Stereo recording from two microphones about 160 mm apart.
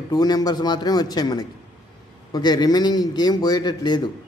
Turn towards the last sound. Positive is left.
turn(degrees=25)  # may be behind; listen again after turning